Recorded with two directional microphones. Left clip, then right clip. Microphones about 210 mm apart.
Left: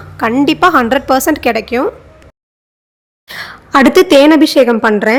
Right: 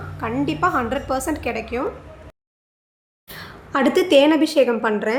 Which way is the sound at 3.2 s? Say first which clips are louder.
Left 11 dB; 35° left (ahead or behind).